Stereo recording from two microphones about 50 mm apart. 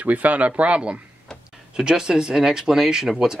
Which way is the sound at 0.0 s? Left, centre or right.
Right.